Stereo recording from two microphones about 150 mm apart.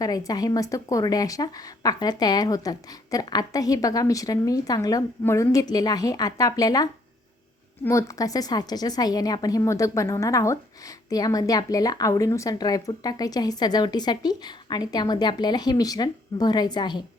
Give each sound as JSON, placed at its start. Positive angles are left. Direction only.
{"t": 0.0, "sound": "a woman's voice", "side_deg": 25}
{"t": 7.9, "sound": "a woman's voice", "side_deg": 20}